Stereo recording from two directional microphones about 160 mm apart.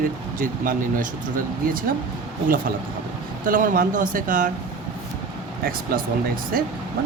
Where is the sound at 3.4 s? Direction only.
55° right (ahead or behind).